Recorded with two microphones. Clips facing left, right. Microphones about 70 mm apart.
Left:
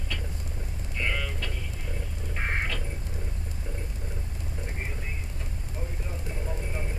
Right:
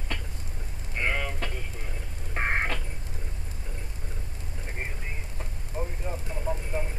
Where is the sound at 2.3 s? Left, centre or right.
Right.